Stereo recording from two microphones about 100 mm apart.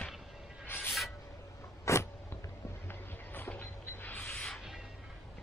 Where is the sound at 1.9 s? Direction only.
30° left (ahead or behind).